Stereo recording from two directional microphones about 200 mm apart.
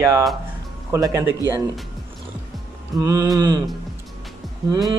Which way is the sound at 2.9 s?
15° right (ahead or behind).